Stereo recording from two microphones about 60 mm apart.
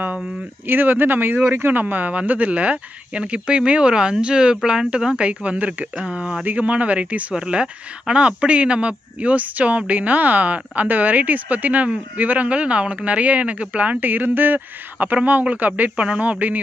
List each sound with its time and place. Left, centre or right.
0.7 s speech: right; by 6.4 s centre
6.4 s speech: right